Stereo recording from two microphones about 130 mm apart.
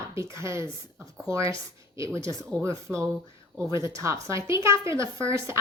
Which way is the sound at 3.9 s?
25° right (ahead or behind).